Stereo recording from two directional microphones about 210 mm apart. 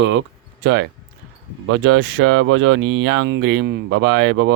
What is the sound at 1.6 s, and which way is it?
Speech, 70° right (ahead or behind).